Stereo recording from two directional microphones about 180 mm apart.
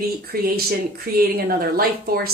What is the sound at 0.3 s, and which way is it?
A woman's voice, 55° right (ahead or behind).